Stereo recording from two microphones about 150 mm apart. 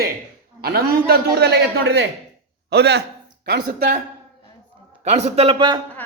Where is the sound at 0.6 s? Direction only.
90° right.